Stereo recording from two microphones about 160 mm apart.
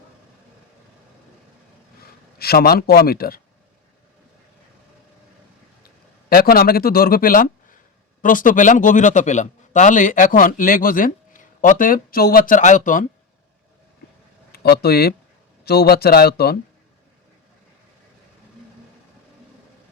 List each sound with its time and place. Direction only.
2.4 s speech: 75° left (ahead or behind)
5.8 s a man's voice: 70° left (ahead or behind)
14.5 s speech: 80° left